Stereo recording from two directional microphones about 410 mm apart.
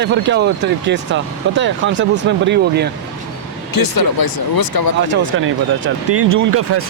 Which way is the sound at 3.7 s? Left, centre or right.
Left.